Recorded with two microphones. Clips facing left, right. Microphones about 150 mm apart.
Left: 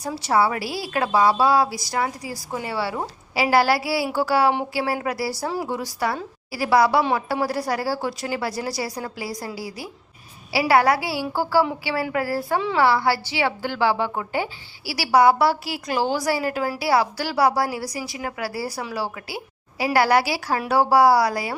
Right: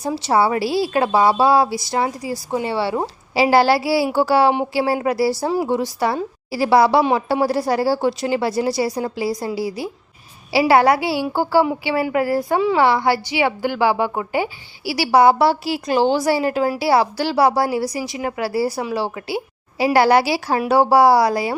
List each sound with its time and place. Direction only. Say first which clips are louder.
0.0 s a woman's voice: right 3 dB; 25° right (ahead or behind)